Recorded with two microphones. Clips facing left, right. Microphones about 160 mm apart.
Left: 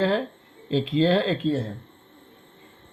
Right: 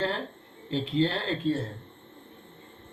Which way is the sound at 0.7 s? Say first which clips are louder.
Left 6 dB; 90° left.